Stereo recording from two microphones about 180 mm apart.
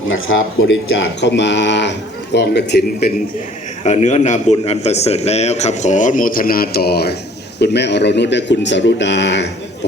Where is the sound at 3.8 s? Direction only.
40° left (ahead or behind).